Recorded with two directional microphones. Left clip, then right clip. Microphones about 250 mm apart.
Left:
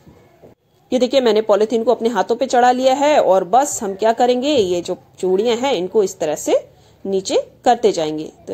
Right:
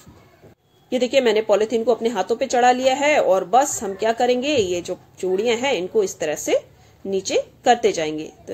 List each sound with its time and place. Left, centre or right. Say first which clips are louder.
0.8 s a woman's voice: left 3 dB; left